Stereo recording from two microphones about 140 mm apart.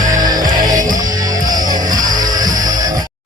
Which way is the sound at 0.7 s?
70° right (ahead or behind).